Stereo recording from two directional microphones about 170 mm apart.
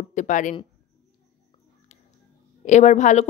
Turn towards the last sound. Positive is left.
turn(degrees=45)  # may be behind; listen again after turning